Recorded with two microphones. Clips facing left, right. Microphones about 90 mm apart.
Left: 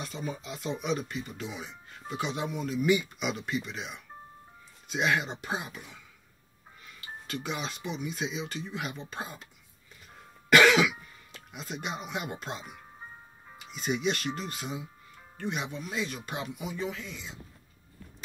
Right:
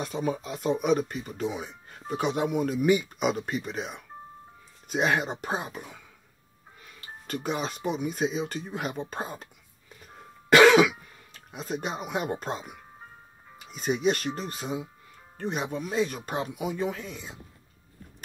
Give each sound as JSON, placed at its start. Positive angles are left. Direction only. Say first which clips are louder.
{"t": 0.0, "sound": "speech", "louder": "right 7 dB", "side_deg": -55}
{"t": 7.0, "sound": "speech", "louder": "right 3 dB", "side_deg": -40}
{"t": 10.5, "sound": "speech", "louder": "right 4 dB", "side_deg": -35}
{"t": 13.7, "sound": "speech", "louder": "right 4 dB", "side_deg": -35}